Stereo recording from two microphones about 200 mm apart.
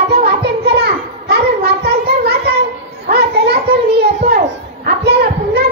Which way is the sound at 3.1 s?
55° right (ahead or behind).